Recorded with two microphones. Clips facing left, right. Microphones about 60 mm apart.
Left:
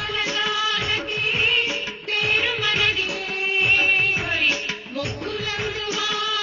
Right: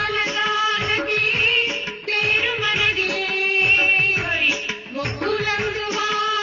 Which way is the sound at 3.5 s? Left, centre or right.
Centre.